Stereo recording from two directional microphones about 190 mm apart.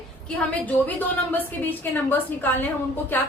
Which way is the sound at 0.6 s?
5° left (ahead or behind).